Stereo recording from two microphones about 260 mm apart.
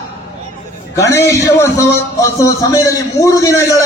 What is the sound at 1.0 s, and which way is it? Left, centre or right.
A man's voice, centre.